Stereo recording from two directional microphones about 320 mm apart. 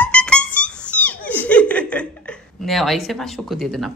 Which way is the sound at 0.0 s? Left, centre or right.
Centre.